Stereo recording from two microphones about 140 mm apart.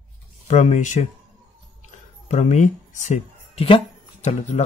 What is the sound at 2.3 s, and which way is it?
Speech, 55° left (ahead or behind).